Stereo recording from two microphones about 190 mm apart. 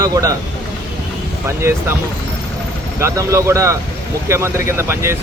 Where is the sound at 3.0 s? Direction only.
15° right (ahead or behind).